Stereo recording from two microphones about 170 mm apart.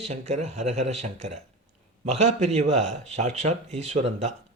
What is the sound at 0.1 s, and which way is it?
Speech, 40° right (ahead or behind).